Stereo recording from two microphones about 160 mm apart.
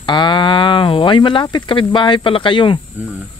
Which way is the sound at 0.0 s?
30° left (ahead or behind).